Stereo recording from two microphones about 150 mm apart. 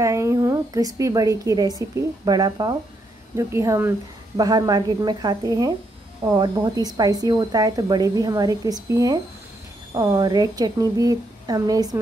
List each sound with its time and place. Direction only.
0.0 s a woman's voice: 20° right (ahead or behind)